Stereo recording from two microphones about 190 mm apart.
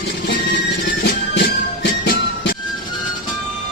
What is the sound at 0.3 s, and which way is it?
Music, 60° left (ahead or behind).